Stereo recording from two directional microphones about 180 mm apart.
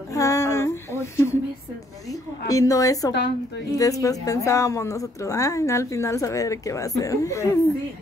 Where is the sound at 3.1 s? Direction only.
70° left (ahead or behind).